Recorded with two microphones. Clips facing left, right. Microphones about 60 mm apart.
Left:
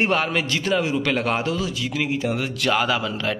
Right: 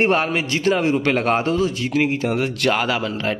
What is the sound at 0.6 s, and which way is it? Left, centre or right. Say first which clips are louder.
A man's voice: right 6 dB; right.